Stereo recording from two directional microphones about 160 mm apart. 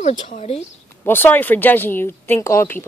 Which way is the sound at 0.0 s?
50° left (ahead or behind).